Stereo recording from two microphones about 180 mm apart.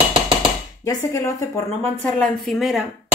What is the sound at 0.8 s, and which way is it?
Speech, 20° left (ahead or behind).